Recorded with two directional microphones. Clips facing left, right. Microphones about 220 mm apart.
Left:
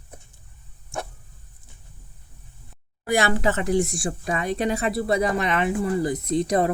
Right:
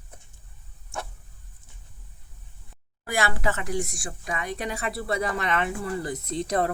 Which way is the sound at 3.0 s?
20° left (ahead or behind).